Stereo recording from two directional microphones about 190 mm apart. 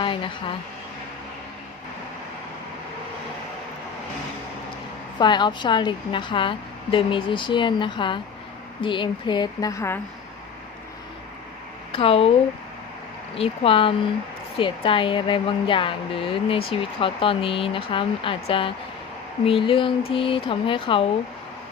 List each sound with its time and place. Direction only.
0.0 s speech: 25° left (ahead or behind)
5.2 s a woman's voice: 25° left (ahead or behind)
11.9 s speech: 30° left (ahead or behind)
13.3 s a woman's voice: 30° left (ahead or behind)